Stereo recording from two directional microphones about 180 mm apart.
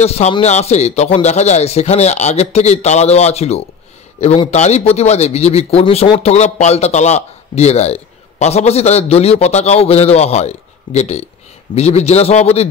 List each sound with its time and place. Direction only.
0.0 s speech: 35° left (ahead or behind)